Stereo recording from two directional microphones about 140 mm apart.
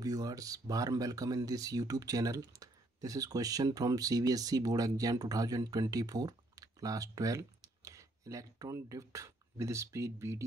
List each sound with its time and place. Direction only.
0.0 s speech: 25° right (ahead or behind)